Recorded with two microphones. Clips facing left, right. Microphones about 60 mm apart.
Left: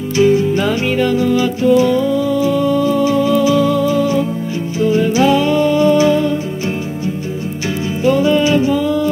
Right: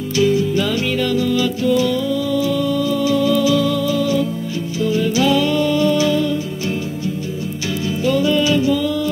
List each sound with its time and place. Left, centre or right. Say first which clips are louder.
0.2 s music: left 4 dB; left
8.0 s music: left 4 dB; left